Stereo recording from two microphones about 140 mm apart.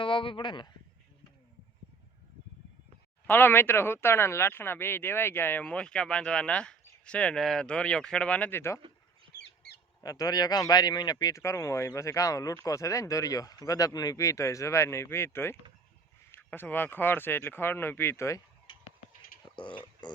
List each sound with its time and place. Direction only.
0.0 s speech: 40° left (ahead or behind)
3.2 s speech: 15° left (ahead or behind)
10.0 s a man's voice: 25° left (ahead or behind)
18.7 s a sound: 35° left (ahead or behind)